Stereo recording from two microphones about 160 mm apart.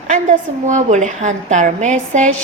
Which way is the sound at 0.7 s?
50° right (ahead or behind).